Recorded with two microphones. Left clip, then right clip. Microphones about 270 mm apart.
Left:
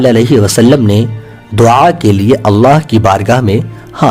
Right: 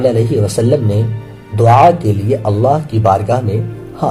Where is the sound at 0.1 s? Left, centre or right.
Left.